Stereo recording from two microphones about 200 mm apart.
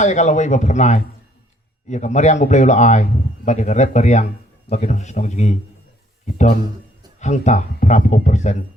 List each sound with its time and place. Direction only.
0.0 s a man's voice: 35° left (ahead or behind)